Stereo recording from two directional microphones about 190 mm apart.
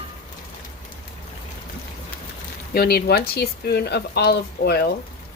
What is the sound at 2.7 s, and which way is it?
A woman's voice, 55° left (ahead or behind).